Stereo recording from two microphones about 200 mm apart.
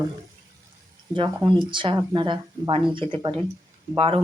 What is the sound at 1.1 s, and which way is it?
Speech, 25° right (ahead or behind).